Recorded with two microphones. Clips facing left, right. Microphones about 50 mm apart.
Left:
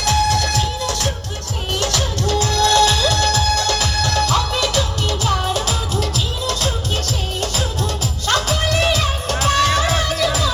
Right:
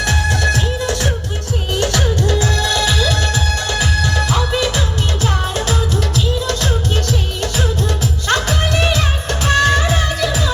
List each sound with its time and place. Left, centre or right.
0.0 s music: right
2.6 s music: centre
5.2 s music: right
8.3 s music: right